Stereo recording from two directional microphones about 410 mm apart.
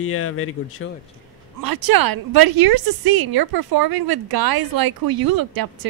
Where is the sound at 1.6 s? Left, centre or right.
Right.